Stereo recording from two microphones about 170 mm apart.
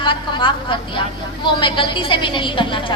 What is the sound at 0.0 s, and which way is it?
A woman's voice, 30° left (ahead or behind).